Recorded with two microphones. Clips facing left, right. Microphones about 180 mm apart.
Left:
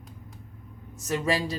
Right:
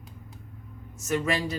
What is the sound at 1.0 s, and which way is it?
Speech, 30° left (ahead or behind).